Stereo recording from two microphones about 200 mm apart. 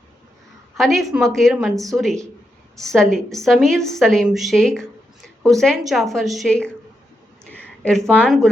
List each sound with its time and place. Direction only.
0.8 s a woman's voice: centre (ahead or behind)